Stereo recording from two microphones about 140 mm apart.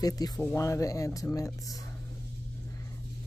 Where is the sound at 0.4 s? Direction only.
20° left (ahead or behind).